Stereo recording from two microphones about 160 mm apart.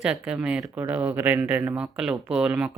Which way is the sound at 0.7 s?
20° right (ahead or behind).